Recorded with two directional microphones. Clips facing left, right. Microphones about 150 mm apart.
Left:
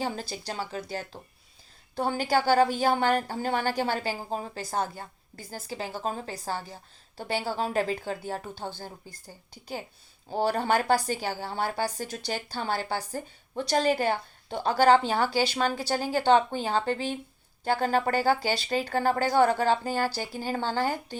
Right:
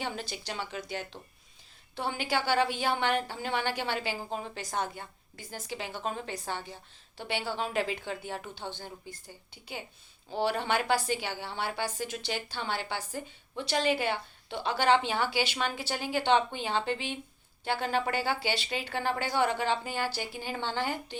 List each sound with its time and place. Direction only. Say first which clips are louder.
0.0 s a woman's voice: left 4 dB; 40° left (ahead or behind)
10.2 s a woman's voice: left 4 dB; 40° left (ahead or behind)